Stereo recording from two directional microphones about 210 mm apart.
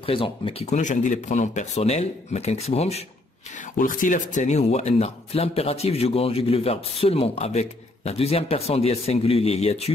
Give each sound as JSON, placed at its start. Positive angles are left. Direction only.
{"t": 0.0, "sound": "speech", "side_deg": 25}
{"t": 3.7, "sound": "speech", "side_deg": 40}